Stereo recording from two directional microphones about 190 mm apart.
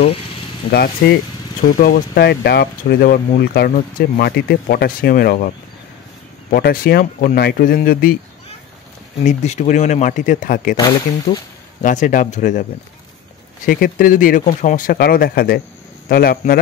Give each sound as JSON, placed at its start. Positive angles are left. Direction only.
{"t": 0.7, "sound": "speech", "side_deg": 55}
{"t": 6.5, "sound": "speech", "side_deg": 50}
{"t": 9.2, "sound": "speech", "side_deg": 40}
{"t": 10.8, "sound": "speech", "side_deg": 25}
{"t": 11.8, "sound": "speech", "side_deg": 40}
{"t": 13.7, "sound": "speech", "side_deg": 45}